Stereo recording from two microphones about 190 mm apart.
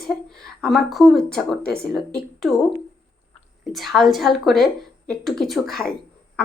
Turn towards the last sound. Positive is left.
turn(degrees=0)  # may be behind; listen again after turning